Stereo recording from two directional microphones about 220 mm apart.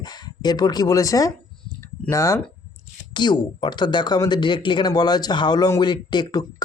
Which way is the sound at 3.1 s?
20° left (ahead or behind).